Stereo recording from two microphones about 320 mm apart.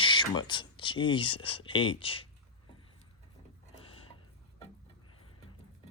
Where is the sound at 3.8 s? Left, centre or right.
Centre.